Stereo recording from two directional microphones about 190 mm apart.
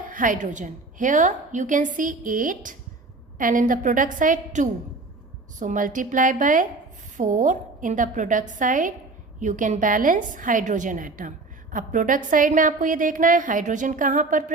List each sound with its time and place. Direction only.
0.1 s a woman's voice: 45° right (ahead or behind)